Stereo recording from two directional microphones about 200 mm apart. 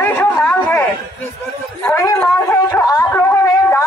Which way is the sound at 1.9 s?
15° left (ahead or behind).